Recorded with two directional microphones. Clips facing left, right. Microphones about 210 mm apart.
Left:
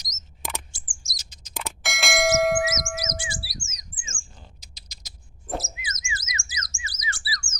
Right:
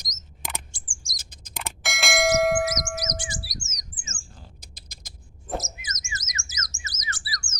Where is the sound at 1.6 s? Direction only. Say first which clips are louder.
Even; centre (ahead or behind).